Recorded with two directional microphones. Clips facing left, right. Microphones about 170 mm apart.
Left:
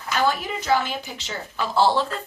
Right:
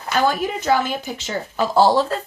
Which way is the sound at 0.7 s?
45° right (ahead or behind).